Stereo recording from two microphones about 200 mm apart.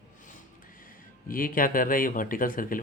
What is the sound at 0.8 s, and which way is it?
Speech, 45° left (ahead or behind).